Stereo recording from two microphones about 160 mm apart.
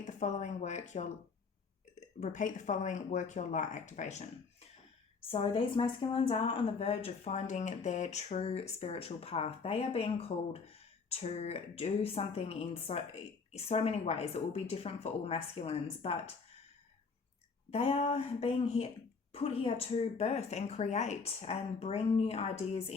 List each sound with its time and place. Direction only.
0.0 s speech: 50° left (ahead or behind)
5.3 s speech: 35° left (ahead or behind)
17.7 s speech: 40° left (ahead or behind)